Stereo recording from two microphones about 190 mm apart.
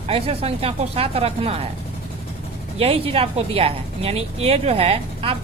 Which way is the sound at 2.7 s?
30° right (ahead or behind).